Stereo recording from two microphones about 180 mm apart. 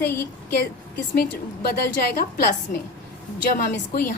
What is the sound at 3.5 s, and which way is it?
Speech, 50° left (ahead or behind).